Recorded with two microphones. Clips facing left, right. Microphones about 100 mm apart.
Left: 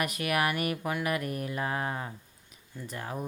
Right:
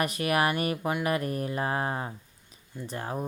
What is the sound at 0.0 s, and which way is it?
Speech, 30° right (ahead or behind).